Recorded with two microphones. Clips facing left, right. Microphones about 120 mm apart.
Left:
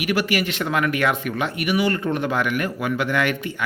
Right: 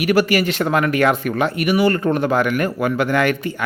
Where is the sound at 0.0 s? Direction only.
40° right (ahead or behind).